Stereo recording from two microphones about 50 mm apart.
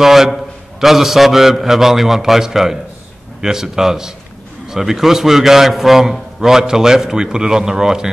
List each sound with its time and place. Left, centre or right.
0.0 s a man's voice: centre